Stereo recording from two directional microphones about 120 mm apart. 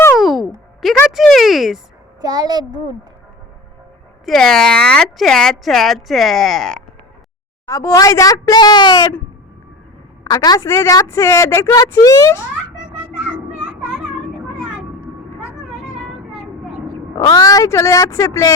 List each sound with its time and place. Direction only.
0.2 s music: centre (ahead or behind)
2.2 s a child's voice: 35° right (ahead or behind)
4.3 s speech: 5° left (ahead or behind)
7.7 s a woman's voice: 25° left (ahead or behind)
10.2 s a woman's voice: 30° left (ahead or behind)
17.2 s a woman's voice: 35° left (ahead or behind)